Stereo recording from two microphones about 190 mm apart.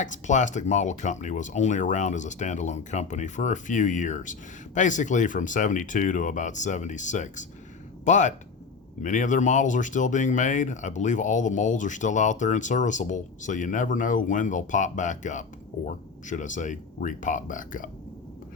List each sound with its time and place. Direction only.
0.0 s speech: 40° left (ahead or behind)